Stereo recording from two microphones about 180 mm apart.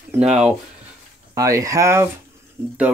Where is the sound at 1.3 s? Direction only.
15° right (ahead or behind).